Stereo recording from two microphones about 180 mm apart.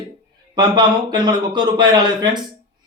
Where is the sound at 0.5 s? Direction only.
25° right (ahead or behind).